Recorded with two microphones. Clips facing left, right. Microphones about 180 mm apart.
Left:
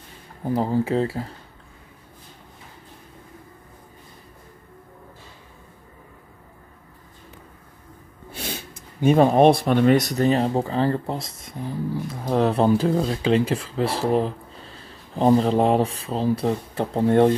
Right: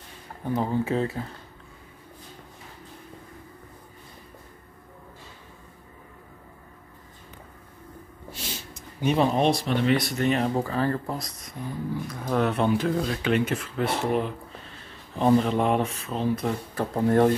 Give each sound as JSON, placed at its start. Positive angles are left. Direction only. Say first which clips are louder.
{"t": 0.4, "sound": "speech", "louder": "left 4 dB", "side_deg": 35}
{"t": 8.3, "sound": "speech", "louder": "left 5 dB", "side_deg": 60}